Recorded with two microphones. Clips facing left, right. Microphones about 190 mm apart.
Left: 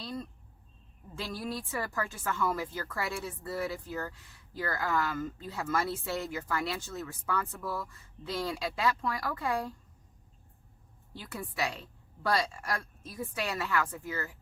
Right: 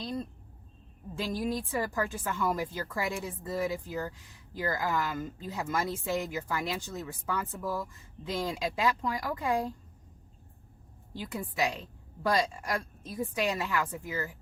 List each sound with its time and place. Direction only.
0.0 s a sound: 20° right (ahead or behind)
1.3 s speech: 15° right (ahead or behind)
11.2 s speech: 15° right (ahead or behind)